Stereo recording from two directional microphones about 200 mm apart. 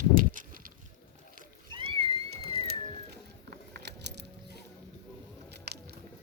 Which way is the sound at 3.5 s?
55° right (ahead or behind).